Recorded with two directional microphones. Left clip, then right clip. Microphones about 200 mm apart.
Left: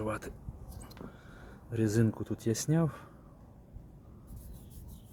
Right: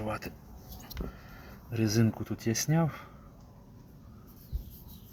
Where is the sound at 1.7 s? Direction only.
10° left (ahead or behind).